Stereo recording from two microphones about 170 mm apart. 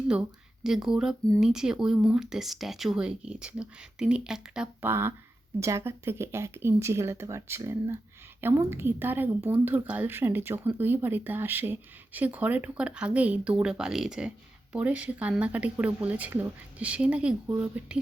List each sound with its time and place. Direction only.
0.1 s speech: 5° right (ahead or behind)